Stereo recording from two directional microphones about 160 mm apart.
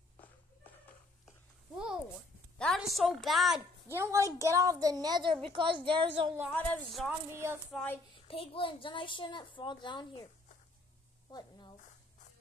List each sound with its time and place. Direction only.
0.2 s a sound: 10° left (ahead or behind)
2.6 s a woman's voice: centre (ahead or behind)
3.9 s a woman's voice: 15° right (ahead or behind)
6.5 s speech: 5° left (ahead or behind)
7.1 s speech: 15° right (ahead or behind)
7.7 s a child's voice: 10° left (ahead or behind)
8.3 s a woman's voice: 35° left (ahead or behind)
11.3 s a sound: 25° left (ahead or behind)